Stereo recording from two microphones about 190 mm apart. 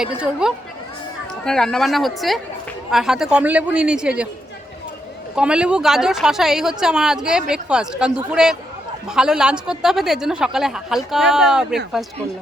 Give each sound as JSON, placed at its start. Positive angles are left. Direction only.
{"t": 0.0, "sound": "a woman's voice", "side_deg": -5}
{"t": 5.4, "sound": "a woman's voice", "side_deg": -5}